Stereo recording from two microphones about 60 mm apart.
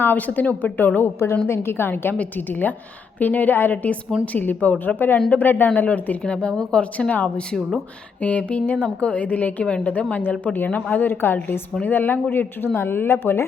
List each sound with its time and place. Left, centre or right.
0.0 s a woman's voice: left
1.2 s a woman's voice: left
6.2 s speech: centre
6.9 s a woman's voice: left